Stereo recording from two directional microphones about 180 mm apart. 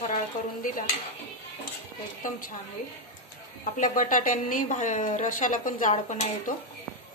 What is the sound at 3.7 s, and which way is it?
A woman's voice, 45° left (ahead or behind).